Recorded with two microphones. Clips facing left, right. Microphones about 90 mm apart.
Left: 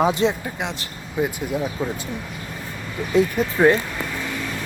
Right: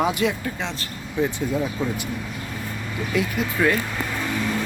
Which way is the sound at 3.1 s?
30° left (ahead or behind).